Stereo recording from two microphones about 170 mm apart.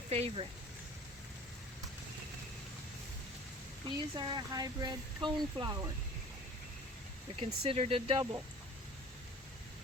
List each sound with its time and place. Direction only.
0.1 s speech: 40° right (ahead or behind)
3.8 s speech: 25° right (ahead or behind)
7.3 s speech: 35° right (ahead or behind)